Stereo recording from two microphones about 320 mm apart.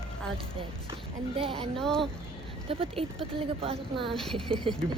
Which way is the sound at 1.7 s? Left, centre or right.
Centre.